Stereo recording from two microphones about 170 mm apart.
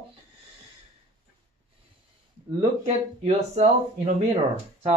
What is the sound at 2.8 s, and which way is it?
Speech, 40° right (ahead or behind).